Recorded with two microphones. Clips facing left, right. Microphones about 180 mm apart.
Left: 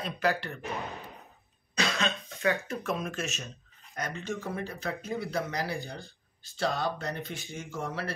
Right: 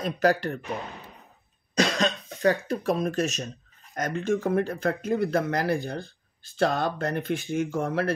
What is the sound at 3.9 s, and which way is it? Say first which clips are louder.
Speech: right 9 dB; 50° right (ahead or behind).